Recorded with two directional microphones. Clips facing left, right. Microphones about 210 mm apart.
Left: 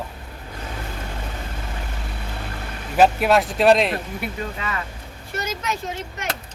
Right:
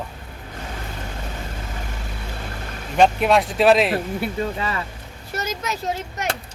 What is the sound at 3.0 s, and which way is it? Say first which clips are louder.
Speech: even; 5° left (ahead or behind).